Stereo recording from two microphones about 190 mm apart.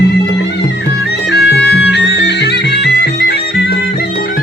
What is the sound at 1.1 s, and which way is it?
Music, 60° left (ahead or behind).